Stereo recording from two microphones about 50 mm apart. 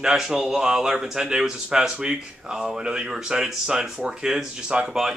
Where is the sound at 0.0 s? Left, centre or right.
Centre.